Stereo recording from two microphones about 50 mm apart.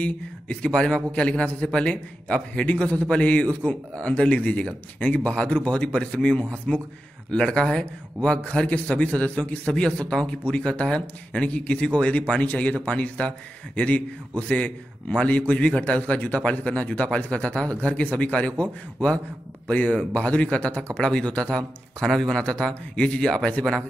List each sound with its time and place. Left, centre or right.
0.0 s a man's voice: left